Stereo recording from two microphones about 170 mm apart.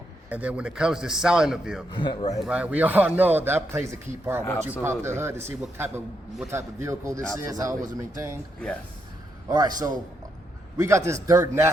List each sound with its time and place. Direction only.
0.3 s a man's voice: 10° right (ahead or behind)
1.9 s speech: 25° left (ahead or behind)
2.4 s a man's voice: 5° right (ahead or behind)
4.4 s speech: 15° left (ahead or behind)
4.8 s a man's voice: 15° right (ahead or behind)
9.5 s a man's voice: 20° right (ahead or behind)
10.8 s a man's voice: 15° right (ahead or behind)